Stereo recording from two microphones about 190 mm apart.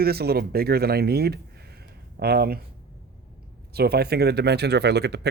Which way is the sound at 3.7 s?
55° right (ahead or behind).